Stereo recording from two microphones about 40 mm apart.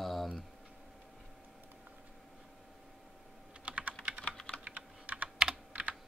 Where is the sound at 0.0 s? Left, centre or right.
Centre.